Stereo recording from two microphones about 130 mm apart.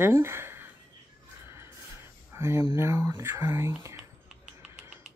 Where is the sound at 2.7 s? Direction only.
20° right (ahead or behind).